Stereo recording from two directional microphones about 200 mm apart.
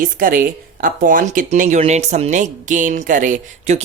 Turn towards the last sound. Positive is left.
turn(degrees=-40)  # may be behind; listen again after turning